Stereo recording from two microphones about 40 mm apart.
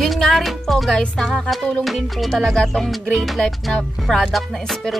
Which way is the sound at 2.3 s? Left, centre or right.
Centre.